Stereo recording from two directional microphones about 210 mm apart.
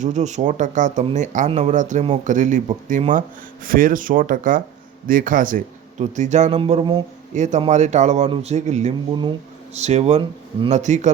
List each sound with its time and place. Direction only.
0.0 s speech: 35° right (ahead or behind)